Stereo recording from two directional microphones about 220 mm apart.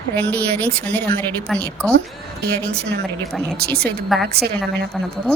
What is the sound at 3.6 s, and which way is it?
Speech, 45° right (ahead or behind).